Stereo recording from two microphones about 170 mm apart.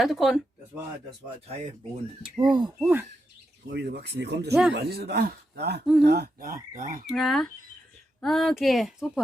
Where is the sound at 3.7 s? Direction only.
75° right (ahead or behind); by 7.1 s 55° right (ahead or behind).